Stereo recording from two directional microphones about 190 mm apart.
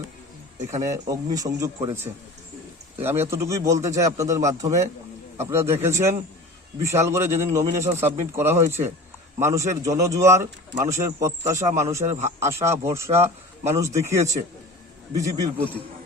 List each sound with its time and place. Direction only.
0.8 s speech: 20° right (ahead or behind)
3.0 s speech: 10° right (ahead or behind)